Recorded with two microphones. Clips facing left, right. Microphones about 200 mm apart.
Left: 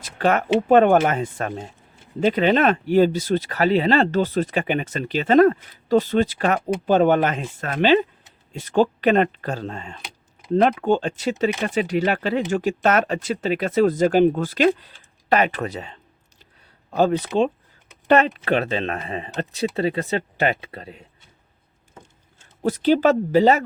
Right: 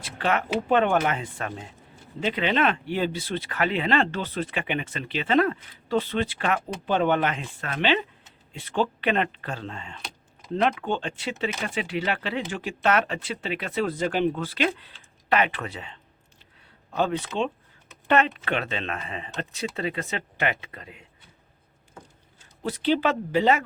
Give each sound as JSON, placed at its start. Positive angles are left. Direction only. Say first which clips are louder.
{"t": 0.0, "sound": "speech", "louder": "left 6 dB", "side_deg": 45}
{"t": 22.6, "sound": "speech", "louder": "left 7 dB", "side_deg": 45}